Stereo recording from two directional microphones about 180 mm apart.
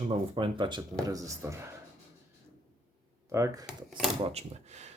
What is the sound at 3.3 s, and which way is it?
Speech, 20° right (ahead or behind).